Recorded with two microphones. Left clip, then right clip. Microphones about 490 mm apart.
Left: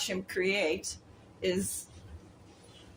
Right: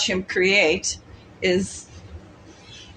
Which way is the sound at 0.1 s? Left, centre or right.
Left.